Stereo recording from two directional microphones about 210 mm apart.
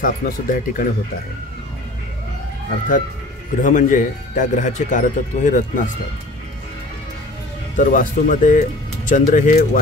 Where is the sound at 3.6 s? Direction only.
35° left (ahead or behind).